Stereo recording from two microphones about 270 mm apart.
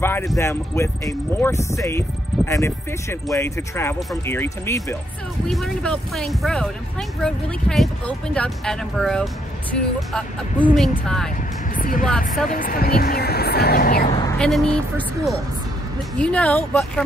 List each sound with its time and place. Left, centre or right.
0.0 s speech: centre
11.7 s speech: left
14.4 s speech: centre